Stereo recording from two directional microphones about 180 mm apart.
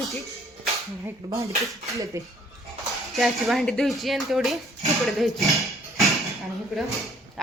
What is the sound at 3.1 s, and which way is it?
Speech, centre (ahead or behind).